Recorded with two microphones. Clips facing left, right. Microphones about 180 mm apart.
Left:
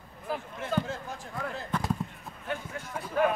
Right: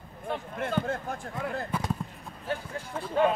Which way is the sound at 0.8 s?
55° right (ahead or behind).